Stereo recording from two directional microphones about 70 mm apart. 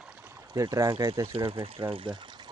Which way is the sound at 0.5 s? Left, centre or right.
Right.